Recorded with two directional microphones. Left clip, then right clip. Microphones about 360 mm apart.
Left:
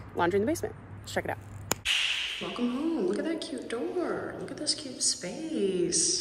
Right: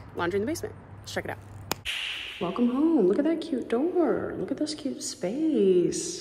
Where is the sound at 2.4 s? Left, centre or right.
Centre.